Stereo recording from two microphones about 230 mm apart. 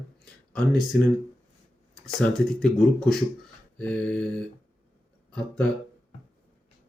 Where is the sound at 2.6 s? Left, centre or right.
Centre.